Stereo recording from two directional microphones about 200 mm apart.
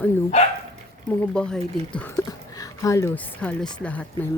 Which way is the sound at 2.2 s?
15° left (ahead or behind).